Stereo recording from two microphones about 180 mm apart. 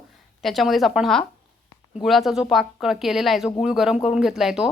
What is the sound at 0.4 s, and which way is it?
A woman's voice, centre (ahead or behind).